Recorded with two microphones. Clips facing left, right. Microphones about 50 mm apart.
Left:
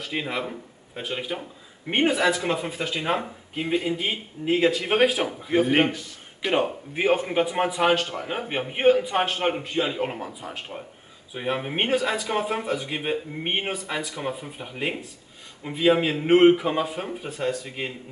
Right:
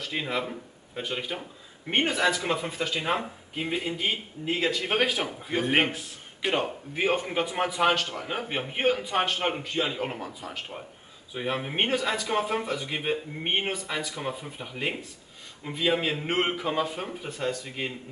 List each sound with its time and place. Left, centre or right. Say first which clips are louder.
0.0 s a man's voice: left 1 dB; centre